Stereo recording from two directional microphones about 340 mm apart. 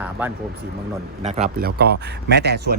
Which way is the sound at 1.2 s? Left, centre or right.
Centre.